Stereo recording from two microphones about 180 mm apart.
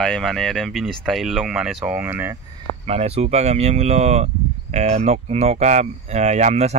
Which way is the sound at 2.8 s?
35° right (ahead or behind).